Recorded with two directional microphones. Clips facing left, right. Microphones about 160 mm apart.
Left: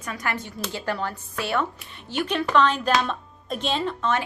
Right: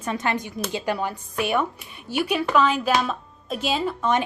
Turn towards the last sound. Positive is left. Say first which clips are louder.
# right 2 dB
turn(degrees=-15)  # may be behind; listen again after turning